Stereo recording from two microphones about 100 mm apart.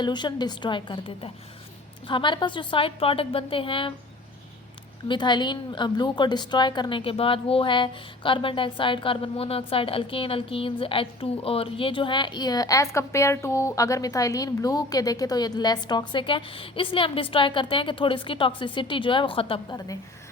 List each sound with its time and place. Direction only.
0.0 s a woman's voice: 50° left (ahead or behind)
5.0 s a woman's voice: 50° left (ahead or behind); by 19.6 s 65° left (ahead or behind)